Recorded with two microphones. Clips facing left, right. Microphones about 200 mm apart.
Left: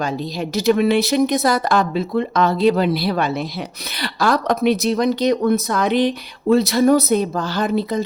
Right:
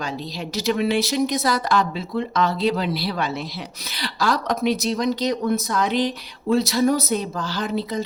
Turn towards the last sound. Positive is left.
turn(degrees=55)  # may be behind; listen again after turning